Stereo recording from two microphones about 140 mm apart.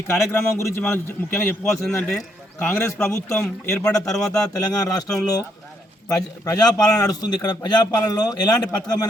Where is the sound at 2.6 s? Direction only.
20° left (ahead or behind).